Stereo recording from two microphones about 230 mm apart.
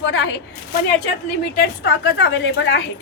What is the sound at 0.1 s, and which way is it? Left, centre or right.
Speech, left.